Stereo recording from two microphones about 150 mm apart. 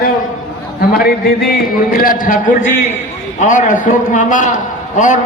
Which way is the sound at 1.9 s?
70° left (ahead or behind).